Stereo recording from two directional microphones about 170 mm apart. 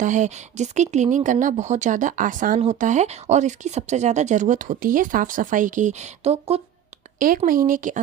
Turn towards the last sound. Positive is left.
turn(degrees=-50)  # may be behind; listen again after turning